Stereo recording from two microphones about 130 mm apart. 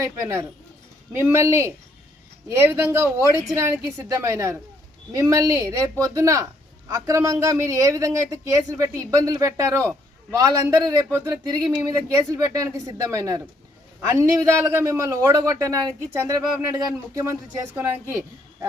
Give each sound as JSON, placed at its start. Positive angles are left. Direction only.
{"t": 0.0, "sound": "speech", "side_deg": -20}